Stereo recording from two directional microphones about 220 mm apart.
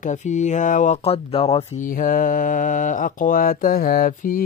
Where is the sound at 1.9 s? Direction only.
40° left (ahead or behind).